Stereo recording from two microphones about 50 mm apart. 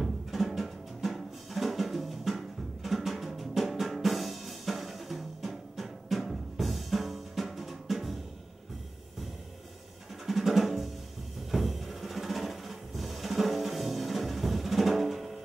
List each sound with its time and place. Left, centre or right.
0.0 s drum: centre
10.2 s drum: centre
11.5 s music: centre